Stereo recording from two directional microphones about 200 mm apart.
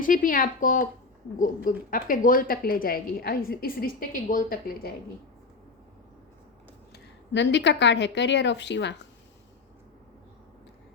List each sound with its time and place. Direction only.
0.0 s a woman's voice: 40° left (ahead or behind)
7.3 s a woman's voice: 60° left (ahead or behind)